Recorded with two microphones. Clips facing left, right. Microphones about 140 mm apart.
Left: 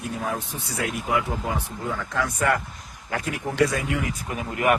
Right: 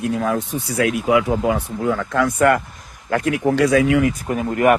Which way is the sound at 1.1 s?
90° right.